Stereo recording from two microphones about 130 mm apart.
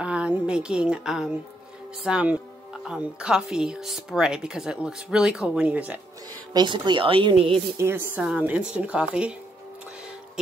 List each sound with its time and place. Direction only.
0.0 s a woman's voice: 10° right (ahead or behind)
6.5 s speech: 35° right (ahead or behind)
7.7 s a woman's voice: 20° right (ahead or behind)